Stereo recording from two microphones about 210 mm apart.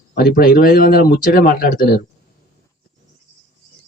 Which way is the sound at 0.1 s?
45° left (ahead or behind).